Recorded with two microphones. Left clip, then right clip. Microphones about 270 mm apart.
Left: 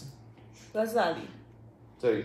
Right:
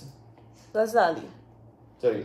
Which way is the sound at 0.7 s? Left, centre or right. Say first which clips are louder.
Right 5 dB; centre.